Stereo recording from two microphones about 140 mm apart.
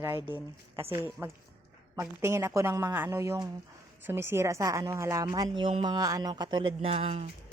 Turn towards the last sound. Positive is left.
turn(degrees=-45)  # may be behind; listen again after turning